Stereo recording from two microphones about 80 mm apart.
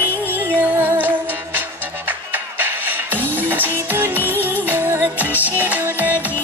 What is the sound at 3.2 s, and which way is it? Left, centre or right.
Music, right.